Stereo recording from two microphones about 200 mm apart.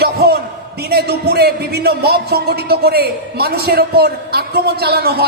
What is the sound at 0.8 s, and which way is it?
Speech, 50° right (ahead or behind).